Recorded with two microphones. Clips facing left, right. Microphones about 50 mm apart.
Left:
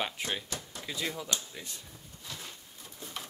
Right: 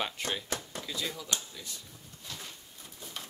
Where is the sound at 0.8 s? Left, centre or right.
Left.